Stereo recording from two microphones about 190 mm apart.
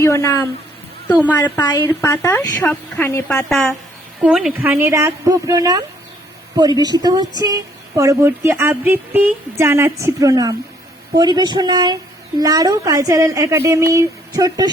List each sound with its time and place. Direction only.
0.0 s speech: 15° left (ahead or behind)
1.5 s a woman's voice: 20° left (ahead or behind); by 14.7 s 20° right (ahead or behind)